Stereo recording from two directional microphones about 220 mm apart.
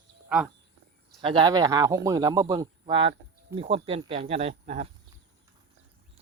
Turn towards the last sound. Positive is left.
turn(degrees=-30)  # may be behind; listen again after turning